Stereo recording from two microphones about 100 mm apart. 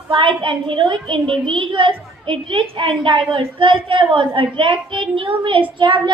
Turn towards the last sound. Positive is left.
turn(degrees=-55)  # may be behind; listen again after turning